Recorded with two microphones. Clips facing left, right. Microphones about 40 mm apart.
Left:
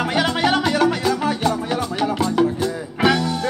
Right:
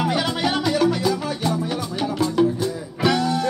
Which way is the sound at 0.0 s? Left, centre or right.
Left.